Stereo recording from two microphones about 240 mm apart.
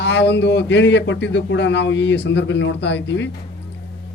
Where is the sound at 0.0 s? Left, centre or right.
Left.